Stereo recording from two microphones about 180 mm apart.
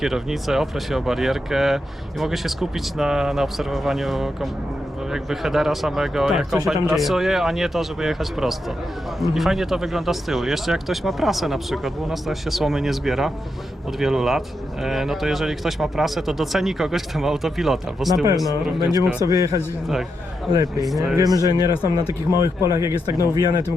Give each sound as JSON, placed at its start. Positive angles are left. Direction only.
{"t": 0.0, "sound": "speech", "side_deg": 0}
{"t": 19.2, "sound": "speech", "side_deg": -20}
{"t": 20.8, "sound": "speech", "side_deg": 0}
{"t": 21.2, "sound": "speech", "side_deg": -20}